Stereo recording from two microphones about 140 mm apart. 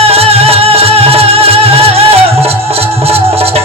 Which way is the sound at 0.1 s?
45° right (ahead or behind).